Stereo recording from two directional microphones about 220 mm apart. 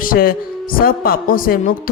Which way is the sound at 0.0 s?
40° left (ahead or behind).